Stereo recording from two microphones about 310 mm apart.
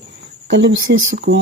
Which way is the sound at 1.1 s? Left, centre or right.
Right.